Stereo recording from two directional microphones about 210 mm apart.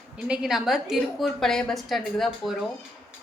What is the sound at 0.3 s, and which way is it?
A woman's voice, centre (ahead or behind).